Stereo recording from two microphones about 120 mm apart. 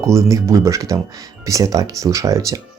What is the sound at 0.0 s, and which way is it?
Speech, 25° right (ahead or behind).